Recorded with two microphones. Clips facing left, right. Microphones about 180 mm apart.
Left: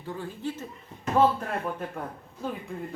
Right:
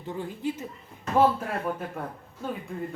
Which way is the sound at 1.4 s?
5° right (ahead or behind).